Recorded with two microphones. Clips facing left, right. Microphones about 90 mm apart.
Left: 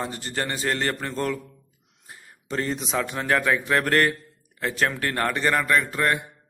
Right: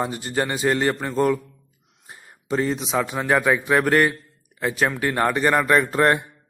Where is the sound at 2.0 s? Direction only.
25° right (ahead or behind).